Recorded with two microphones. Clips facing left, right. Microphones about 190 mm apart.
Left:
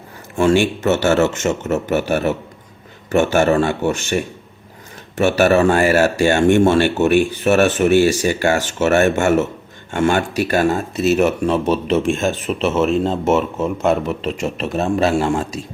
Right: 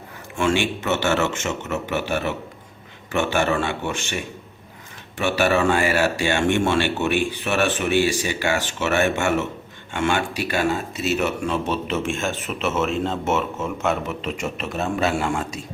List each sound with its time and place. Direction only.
0.3 s a man's voice: 40° left (ahead or behind)